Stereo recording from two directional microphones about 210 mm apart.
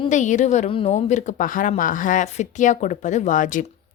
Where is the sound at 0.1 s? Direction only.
35° left (ahead or behind).